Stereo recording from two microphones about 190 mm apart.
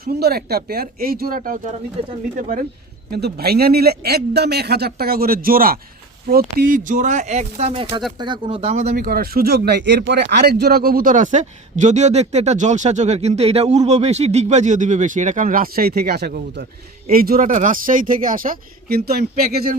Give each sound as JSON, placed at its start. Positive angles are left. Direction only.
{"t": 0.0, "sound": "speech", "side_deg": -55}
{"t": 3.1, "sound": "a man's voice", "side_deg": -60}
{"t": 9.0, "sound": "a man's voice", "side_deg": -50}